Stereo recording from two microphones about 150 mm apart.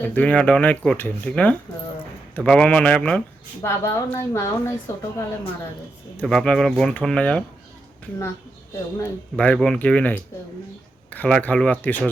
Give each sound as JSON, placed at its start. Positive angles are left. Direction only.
{"t": 0.0, "sound": "a woman's voice", "side_deg": 10}
{"t": 3.6, "sound": "a woman's voice", "side_deg": 15}
{"t": 6.1, "sound": "speech", "side_deg": 5}
{"t": 9.3, "sound": "a woman's voice", "side_deg": 10}